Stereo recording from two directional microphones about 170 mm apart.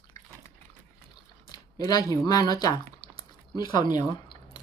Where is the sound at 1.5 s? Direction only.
20° left (ahead or behind).